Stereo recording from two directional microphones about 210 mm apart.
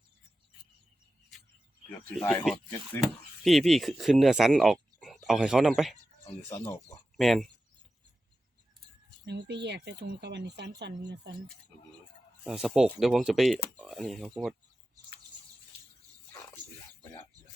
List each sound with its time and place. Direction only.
1.9 s speech: 10° left (ahead or behind)
7.2 s speech: centre (ahead or behind)
9.2 s speech: 55° right (ahead or behind)
12.5 s speech: centre (ahead or behind)